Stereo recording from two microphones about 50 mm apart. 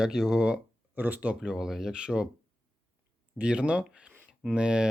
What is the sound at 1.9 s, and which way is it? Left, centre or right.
Speech, centre.